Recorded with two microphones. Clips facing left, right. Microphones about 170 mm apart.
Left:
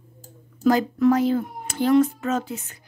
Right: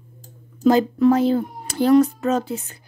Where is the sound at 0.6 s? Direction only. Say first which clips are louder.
Right 3 dB; 30° right (ahead or behind).